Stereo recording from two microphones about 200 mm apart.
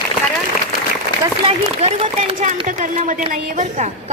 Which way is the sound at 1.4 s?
30° right (ahead or behind).